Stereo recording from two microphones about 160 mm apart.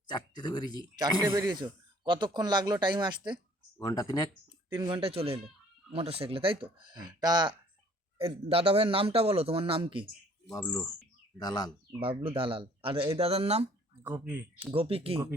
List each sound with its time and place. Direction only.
0.1 s speech: 25° left (ahead or behind)
1.2 s speech: 15° right (ahead or behind)
1.5 s speech: 30° right (ahead or behind)
3.8 s speech: 25° left (ahead or behind)
4.7 s a man's voice: 30° right (ahead or behind)
8.2 s a man's voice: 35° right (ahead or behind)
11.3 s speech: 25° left (ahead or behind)
11.9 s a man's voice: 35° right (ahead or behind)
14.0 s speech: 10° right (ahead or behind)
14.7 s a man's voice: 35° right (ahead or behind)